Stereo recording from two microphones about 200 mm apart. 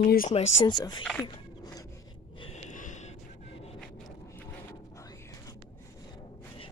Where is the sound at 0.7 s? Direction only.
20° left (ahead or behind).